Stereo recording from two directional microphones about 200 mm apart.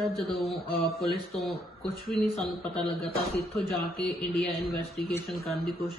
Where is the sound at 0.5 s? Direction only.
50° left (ahead or behind).